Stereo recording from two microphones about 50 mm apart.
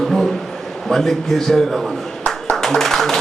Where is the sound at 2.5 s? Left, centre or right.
Centre.